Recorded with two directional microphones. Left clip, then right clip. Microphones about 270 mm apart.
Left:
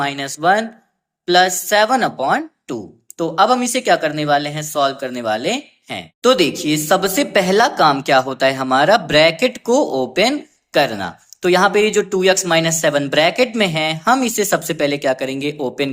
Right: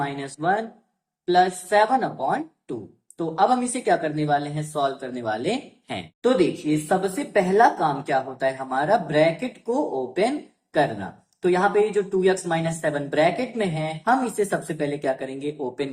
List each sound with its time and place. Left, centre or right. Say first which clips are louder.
0.0 s speech: left 8 dB; left
6.2 s speech: left 7 dB; left